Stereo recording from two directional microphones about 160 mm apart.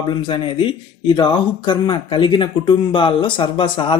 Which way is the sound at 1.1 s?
30° left (ahead or behind).